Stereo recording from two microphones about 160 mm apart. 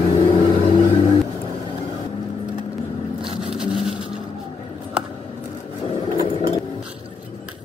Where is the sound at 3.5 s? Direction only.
5° right (ahead or behind).